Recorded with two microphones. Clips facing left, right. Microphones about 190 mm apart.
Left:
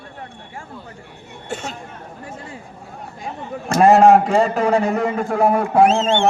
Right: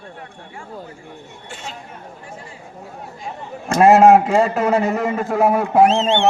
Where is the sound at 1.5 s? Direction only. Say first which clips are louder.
Left 6 dB; 45° left (ahead or behind).